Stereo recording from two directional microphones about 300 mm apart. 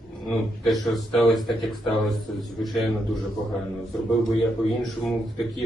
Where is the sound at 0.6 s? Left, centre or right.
Centre.